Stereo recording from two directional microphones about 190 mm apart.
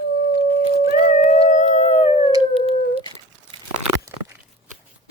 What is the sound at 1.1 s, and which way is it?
Howl, 40° left (ahead or behind).